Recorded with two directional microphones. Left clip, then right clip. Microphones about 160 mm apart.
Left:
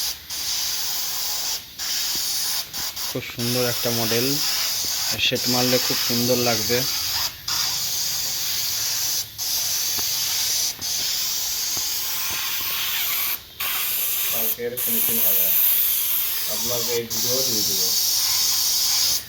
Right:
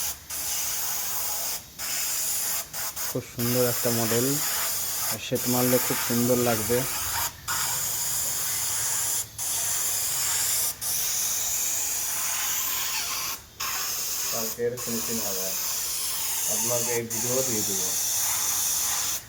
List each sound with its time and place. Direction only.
3.5 s speech: 10° left (ahead or behind)
3.9 s speech: 10° right (ahead or behind)
5.0 s speech: centre (ahead or behind)
17.6 s speech: 45° right (ahead or behind)